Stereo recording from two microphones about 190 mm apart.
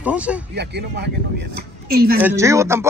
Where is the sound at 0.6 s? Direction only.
60° right (ahead or behind).